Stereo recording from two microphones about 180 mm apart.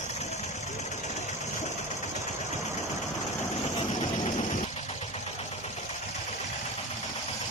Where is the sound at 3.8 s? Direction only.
35° left (ahead or behind).